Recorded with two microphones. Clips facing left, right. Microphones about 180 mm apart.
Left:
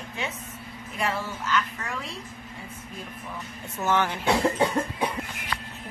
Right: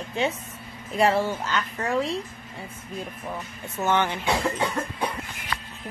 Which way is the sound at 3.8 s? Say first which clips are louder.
Right 1 dB; centre (ahead or behind).